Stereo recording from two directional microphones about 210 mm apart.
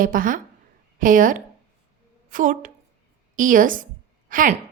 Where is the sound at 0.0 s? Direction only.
40° right (ahead or behind).